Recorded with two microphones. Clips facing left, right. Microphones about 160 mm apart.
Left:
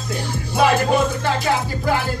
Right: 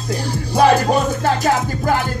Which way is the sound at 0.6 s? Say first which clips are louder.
Right 3 dB; 40° right (ahead or behind).